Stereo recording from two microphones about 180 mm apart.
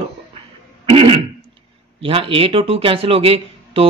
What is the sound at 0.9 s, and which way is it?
Throat clearing, 30° right (ahead or behind).